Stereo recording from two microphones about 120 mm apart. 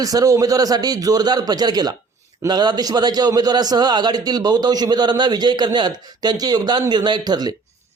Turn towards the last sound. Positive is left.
turn(degrees=-35)  # may be behind; listen again after turning